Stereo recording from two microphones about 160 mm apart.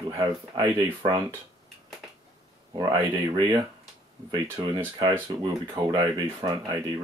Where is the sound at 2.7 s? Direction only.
25° right (ahead or behind).